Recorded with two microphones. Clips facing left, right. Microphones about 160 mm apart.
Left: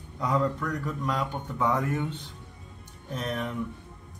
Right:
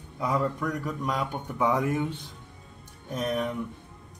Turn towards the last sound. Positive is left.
turn(degrees=-10)  # may be behind; listen again after turning